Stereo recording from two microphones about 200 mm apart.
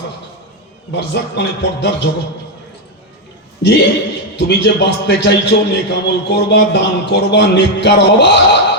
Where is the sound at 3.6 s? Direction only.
60° left (ahead or behind).